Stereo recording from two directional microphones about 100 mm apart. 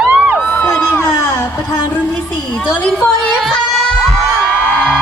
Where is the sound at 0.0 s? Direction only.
15° right (ahead or behind).